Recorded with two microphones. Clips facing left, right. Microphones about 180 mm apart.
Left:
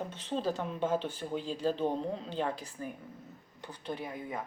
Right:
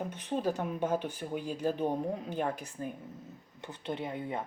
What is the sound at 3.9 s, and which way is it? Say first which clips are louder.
Speech: right 3 dB; 25° right (ahead or behind).